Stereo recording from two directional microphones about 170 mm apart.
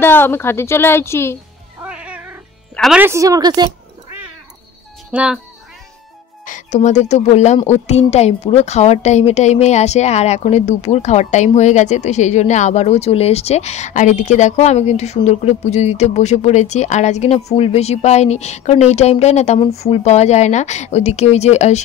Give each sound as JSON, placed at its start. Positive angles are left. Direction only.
{"t": 0.0, "sound": "a woman's voice", "side_deg": 10}
{"t": 1.8, "sound": "cat", "side_deg": -5}
{"t": 2.7, "sound": "music", "side_deg": 0}
{"t": 3.0, "sound": "a woman's voice", "side_deg": -15}
{"t": 5.1, "sound": "speech", "side_deg": -5}
{"t": 6.4, "sound": "a woman's voice", "side_deg": 45}